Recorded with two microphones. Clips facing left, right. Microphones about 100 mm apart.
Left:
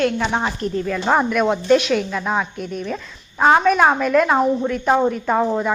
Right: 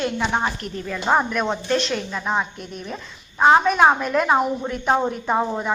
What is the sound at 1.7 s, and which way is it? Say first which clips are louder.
Speech: left 7 dB; 10° left (ahead or behind).